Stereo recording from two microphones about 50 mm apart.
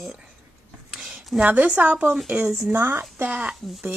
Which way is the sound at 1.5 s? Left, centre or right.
Right.